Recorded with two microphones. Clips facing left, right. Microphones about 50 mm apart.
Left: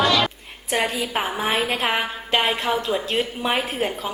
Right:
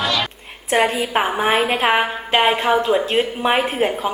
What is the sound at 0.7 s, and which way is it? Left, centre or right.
A woman's voice, right.